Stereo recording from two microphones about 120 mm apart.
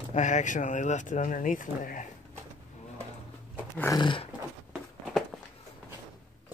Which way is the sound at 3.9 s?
40° left (ahead or behind).